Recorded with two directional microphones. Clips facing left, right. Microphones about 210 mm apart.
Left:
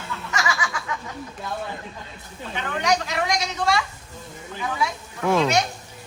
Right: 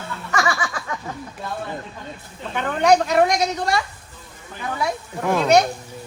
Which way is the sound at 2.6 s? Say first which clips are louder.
Right 7 dB; 50° right (ahead or behind).